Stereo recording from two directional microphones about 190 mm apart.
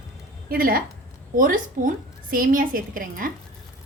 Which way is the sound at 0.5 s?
50° right (ahead or behind).